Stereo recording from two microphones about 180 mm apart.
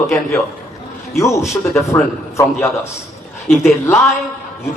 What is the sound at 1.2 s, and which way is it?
Speech, 15° left (ahead or behind).